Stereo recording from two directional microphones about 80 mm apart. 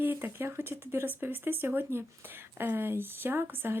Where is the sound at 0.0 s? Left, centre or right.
Right.